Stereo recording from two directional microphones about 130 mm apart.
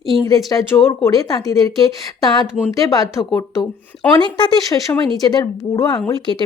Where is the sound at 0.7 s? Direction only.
20° left (ahead or behind).